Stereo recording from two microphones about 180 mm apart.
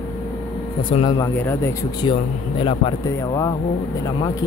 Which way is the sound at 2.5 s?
30° left (ahead or behind).